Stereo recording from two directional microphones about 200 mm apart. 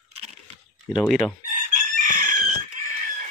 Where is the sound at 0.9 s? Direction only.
Centre (ahead or behind).